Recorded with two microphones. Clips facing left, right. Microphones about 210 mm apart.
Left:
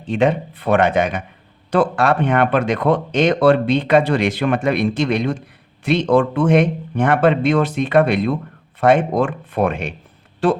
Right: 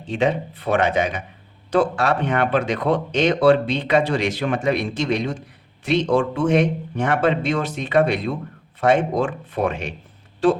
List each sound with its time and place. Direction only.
0.1 s speech: 55° left (ahead or behind)